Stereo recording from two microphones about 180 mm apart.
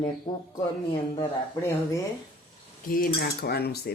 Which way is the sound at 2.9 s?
55° left (ahead or behind).